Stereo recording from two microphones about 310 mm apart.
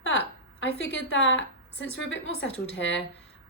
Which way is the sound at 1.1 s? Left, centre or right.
Left.